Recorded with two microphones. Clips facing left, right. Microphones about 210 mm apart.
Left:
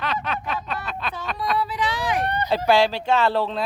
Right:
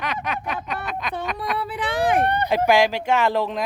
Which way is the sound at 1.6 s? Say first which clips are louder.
Right 1 dB; 55° right (ahead or behind).